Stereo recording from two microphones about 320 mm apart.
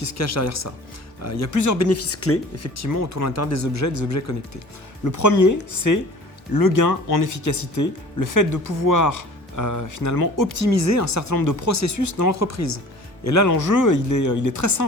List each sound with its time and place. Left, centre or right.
0.0 s speech: left
6.5 s speech: left